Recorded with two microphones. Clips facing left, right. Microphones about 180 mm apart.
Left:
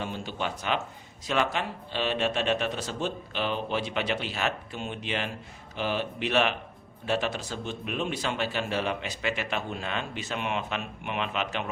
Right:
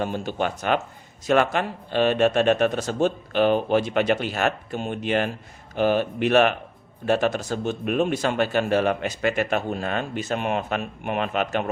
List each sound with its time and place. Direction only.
0.0 s speech: 50° right (ahead or behind)